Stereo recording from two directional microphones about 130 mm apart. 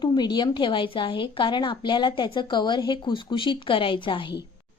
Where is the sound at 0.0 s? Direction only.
35° left (ahead or behind).